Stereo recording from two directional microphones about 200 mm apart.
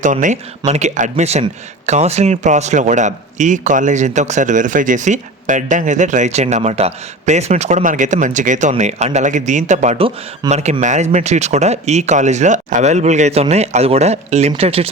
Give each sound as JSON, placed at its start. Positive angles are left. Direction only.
{"t": 0.0, "sound": "a man's voice", "side_deg": -40}